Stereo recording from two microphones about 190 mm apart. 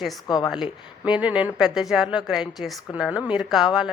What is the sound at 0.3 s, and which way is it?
Speech, 20° left (ahead or behind).